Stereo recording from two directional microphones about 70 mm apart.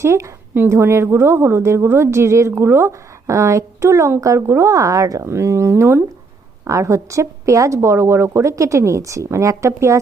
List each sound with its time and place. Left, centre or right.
0.0 s a woman's voice: right
3.2 s a woman's voice: right
6.7 s a woman's voice: right